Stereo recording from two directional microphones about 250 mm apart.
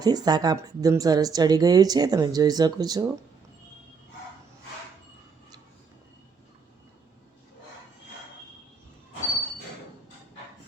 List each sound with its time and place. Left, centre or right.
0.0 s a woman's voice: centre